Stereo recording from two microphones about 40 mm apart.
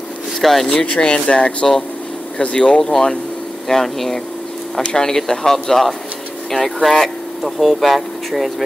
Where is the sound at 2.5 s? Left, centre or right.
Centre.